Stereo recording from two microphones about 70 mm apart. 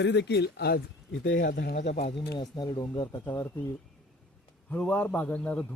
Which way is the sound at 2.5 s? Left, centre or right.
Left.